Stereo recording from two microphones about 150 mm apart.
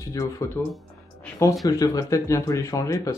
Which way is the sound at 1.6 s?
25° left (ahead or behind).